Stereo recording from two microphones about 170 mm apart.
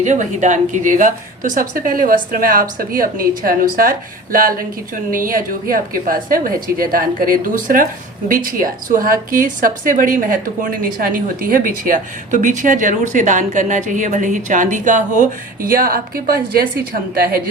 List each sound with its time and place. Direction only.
0.0 s a woman's voice: 45° right (ahead or behind); by 17.4 s 60° right (ahead or behind)